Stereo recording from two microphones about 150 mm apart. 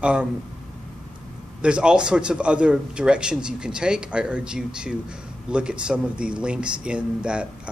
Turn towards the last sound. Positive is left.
turn(degrees=-5)  # may be behind; listen again after turning